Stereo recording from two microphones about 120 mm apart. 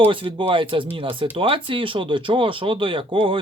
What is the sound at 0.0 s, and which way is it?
Speech, 45° right (ahead or behind).